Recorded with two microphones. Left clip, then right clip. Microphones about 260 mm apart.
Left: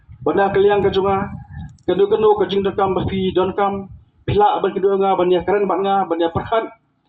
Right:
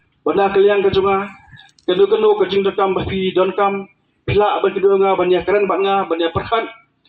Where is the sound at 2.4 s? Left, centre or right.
Centre.